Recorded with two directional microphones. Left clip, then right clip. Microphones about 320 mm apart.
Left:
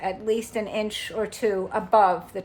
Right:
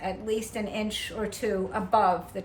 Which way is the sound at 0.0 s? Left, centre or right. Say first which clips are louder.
Left 4 dB; left.